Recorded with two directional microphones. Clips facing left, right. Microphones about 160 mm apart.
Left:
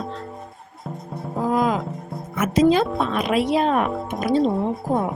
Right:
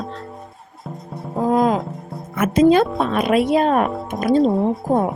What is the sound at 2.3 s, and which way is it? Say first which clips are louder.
Speech: right 3 dB; 55° right (ahead or behind).